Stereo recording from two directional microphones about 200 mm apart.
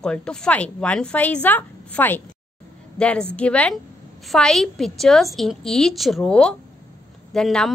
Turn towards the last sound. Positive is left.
turn(degrees=5)  # may be behind; listen again after turning